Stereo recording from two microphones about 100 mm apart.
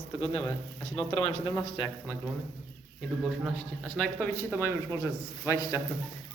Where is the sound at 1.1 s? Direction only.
90° left; by 1.7 s 60° left (ahead or behind).